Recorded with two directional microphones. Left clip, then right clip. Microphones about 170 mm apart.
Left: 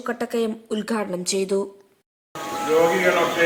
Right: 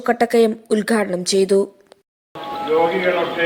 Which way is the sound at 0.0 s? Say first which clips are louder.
Right 9 dB; 30° right (ahead or behind).